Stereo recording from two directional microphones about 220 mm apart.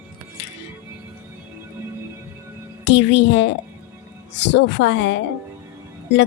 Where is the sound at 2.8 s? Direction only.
55° left (ahead or behind).